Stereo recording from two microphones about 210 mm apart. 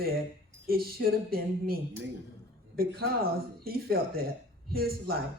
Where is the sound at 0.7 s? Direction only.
45° right (ahead or behind).